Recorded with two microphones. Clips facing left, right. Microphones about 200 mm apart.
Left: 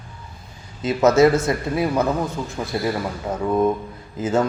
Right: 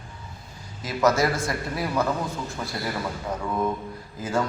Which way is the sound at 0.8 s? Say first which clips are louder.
Left 7 dB; 25° left (ahead or behind).